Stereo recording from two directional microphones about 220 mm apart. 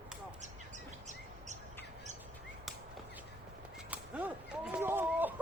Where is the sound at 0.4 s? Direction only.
30° right (ahead or behind).